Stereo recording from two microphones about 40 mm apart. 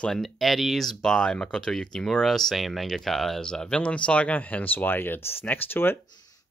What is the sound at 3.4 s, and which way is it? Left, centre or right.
Speech, centre.